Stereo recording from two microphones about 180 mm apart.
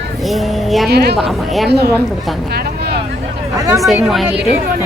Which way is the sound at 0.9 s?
65° right (ahead or behind).